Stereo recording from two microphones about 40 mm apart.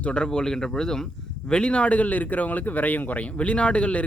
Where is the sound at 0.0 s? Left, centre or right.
Left.